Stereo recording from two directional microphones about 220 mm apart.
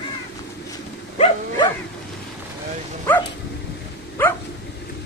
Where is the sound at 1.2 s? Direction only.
25° left (ahead or behind).